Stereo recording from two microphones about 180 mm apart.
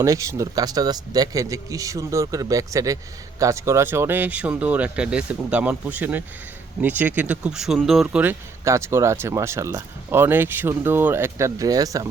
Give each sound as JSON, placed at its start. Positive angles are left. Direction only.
{"t": 0.0, "sound": "speech", "side_deg": -15}